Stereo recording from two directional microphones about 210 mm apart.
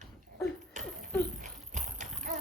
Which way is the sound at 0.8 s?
35° right (ahead or behind).